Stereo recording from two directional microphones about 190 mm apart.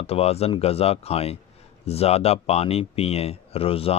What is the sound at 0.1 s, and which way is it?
Speech, 30° left (ahead or behind).